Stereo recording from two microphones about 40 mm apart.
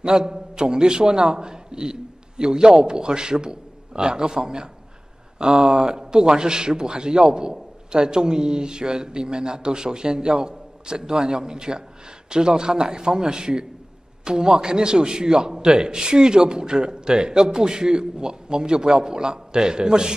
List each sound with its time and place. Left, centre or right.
0.0 s a man's voice: centre